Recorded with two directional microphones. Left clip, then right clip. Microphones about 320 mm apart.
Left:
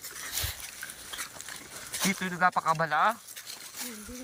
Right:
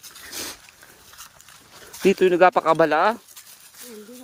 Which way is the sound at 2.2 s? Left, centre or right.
Right.